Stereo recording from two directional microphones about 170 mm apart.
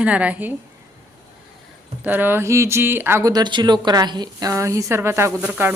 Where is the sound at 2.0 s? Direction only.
10° right (ahead or behind).